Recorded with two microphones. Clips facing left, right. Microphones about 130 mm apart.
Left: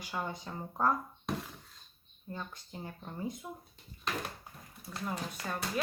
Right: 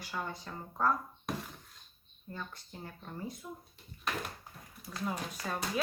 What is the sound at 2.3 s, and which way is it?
Speech, 20° left (ahead or behind).